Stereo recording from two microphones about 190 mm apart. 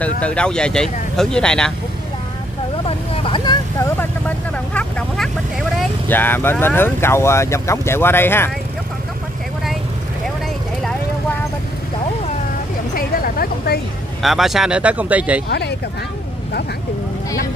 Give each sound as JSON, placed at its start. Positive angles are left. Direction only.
{"t": 0.0, "sound": "speech", "side_deg": 5}
{"t": 3.3, "sound": "vehicle", "side_deg": 25}
{"t": 4.7, "sound": "speech", "side_deg": 5}
{"t": 12.9, "sound": "vehicle", "side_deg": 50}
{"t": 14.2, "sound": "speech", "side_deg": 0}